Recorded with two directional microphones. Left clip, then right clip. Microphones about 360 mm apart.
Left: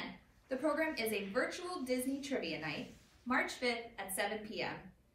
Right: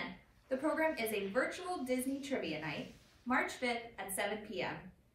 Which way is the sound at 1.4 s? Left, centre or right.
Right.